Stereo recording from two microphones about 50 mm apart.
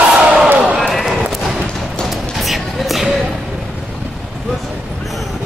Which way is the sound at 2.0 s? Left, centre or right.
Centre.